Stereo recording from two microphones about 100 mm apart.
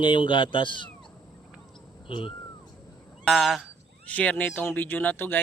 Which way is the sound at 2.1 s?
60° left (ahead or behind).